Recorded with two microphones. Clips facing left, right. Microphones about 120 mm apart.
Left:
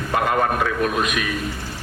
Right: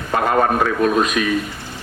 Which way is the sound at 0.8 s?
35° right (ahead or behind).